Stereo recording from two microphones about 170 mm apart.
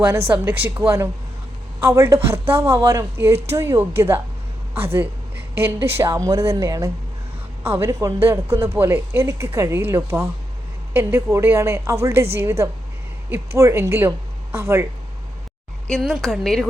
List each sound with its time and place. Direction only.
0.3 s a woman's voice: 10° right (ahead or behind)
15.9 s speech: centre (ahead or behind)